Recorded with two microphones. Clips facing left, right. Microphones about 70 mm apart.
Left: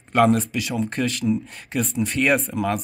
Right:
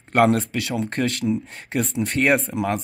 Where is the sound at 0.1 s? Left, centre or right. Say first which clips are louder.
Even; right.